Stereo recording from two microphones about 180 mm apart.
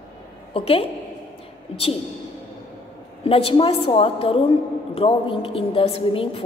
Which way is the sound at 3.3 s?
30° left (ahead or behind).